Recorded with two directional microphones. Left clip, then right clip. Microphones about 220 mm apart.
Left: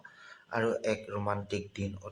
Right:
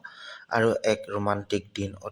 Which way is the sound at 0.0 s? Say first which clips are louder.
Right 9 dB; 35° right (ahead or behind).